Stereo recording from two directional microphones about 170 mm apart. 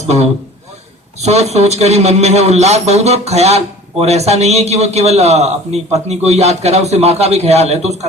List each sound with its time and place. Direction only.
0.0 s a man's voice: 40° right (ahead or behind)